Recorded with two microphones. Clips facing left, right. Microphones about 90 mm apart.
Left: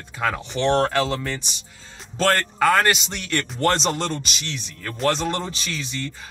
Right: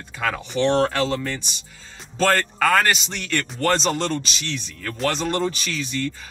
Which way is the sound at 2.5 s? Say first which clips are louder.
Left 1 dB; 10° left (ahead or behind).